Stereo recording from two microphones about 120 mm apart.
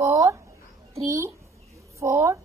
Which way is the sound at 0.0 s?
25° right (ahead or behind).